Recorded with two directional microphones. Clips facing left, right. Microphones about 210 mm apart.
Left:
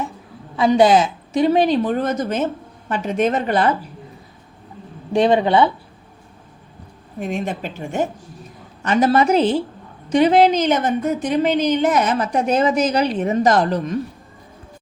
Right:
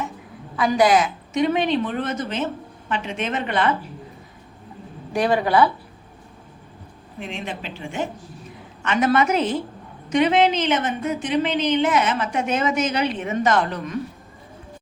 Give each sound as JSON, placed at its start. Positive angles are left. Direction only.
{"t": 0.5, "sound": "a woman's voice", "side_deg": 25}
{"t": 5.1, "sound": "speech", "side_deg": 20}
{"t": 7.2, "sound": "a woman's voice", "side_deg": 45}